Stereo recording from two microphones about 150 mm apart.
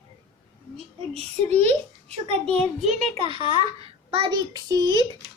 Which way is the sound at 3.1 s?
35° right (ahead or behind).